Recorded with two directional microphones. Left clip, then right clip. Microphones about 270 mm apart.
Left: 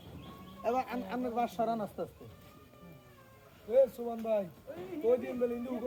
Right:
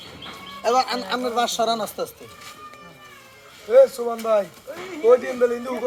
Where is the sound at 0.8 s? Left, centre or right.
Centre.